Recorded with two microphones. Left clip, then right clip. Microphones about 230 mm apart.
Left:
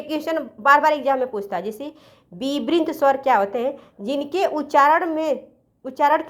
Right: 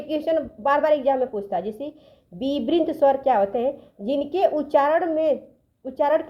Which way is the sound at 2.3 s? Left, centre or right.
Left.